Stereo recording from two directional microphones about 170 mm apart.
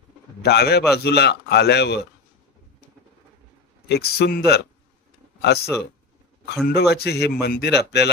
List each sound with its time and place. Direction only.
0.4 s speech: 70° left (ahead or behind)
3.9 s speech: 70° left (ahead or behind)
6.7 s speech: 75° left (ahead or behind)